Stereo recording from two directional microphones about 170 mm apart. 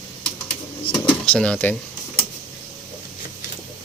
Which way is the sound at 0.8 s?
30° left (ahead or behind).